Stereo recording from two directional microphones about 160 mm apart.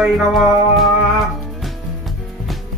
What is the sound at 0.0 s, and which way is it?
Music, centre (ahead or behind).